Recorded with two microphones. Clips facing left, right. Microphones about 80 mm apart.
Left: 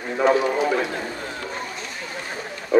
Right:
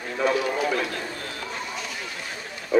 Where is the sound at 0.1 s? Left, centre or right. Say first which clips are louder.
Left 5 dB; left.